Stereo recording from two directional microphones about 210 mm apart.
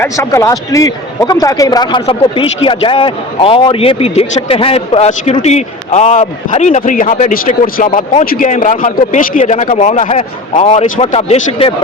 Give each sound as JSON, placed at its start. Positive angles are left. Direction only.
{"t": 0.0, "sound": "a man's voice", "side_deg": 15}